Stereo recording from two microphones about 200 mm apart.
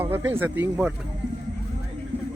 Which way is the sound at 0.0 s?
10° right (ahead or behind).